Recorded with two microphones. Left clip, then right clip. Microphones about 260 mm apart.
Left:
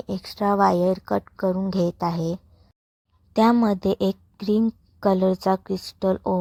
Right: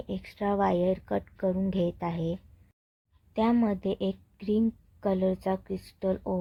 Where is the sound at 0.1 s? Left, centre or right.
Left.